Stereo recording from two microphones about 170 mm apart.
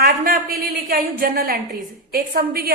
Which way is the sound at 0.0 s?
60° right (ahead or behind).